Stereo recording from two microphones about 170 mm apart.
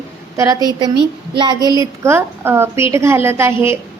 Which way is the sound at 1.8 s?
15° right (ahead or behind).